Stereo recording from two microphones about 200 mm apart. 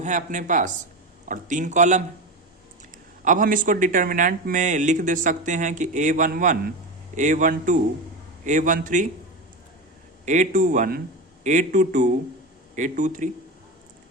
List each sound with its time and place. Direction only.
0.0 s speech: 40° right (ahead or behind)
3.2 s speech: 40° right (ahead or behind)
10.2 s speech: 40° right (ahead or behind)